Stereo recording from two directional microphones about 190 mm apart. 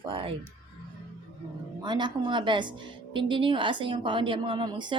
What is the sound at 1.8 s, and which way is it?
A woman's voice, 25° right (ahead or behind).